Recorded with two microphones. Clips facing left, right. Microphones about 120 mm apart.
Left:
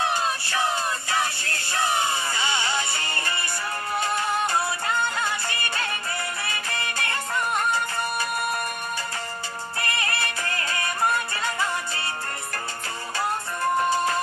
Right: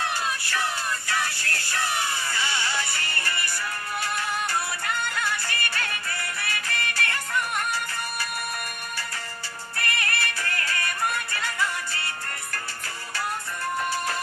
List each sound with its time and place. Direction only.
0.0 s music: 20° left (ahead or behind)
9.7 s music: 20° left (ahead or behind)